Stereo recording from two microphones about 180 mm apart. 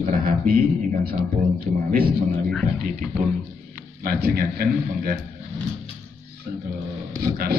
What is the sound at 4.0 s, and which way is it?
A man's voice, 60° right (ahead or behind).